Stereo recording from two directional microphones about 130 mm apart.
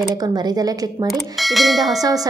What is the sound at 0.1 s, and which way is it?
Speech, 30° right (ahead or behind).